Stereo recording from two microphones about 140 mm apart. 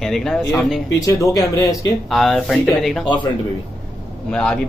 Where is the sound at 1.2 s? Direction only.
25° left (ahead or behind).